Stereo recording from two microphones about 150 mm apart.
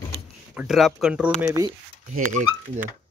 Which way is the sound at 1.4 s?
20° right (ahead or behind).